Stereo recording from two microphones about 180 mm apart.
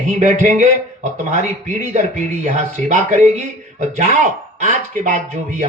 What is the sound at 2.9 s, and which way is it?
Speech, 40° right (ahead or behind).